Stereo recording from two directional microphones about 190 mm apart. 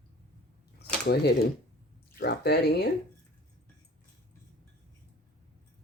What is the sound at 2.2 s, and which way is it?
Speech, 55° left (ahead or behind).